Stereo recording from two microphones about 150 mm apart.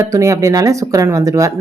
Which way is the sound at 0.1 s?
20° right (ahead or behind).